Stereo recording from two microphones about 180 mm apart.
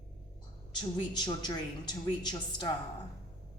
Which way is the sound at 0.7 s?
25° left (ahead or behind).